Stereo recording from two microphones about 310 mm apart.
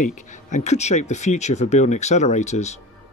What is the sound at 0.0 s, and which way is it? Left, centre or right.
Speech, left.